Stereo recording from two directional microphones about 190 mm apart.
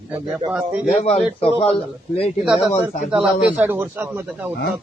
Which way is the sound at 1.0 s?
35° left (ahead or behind).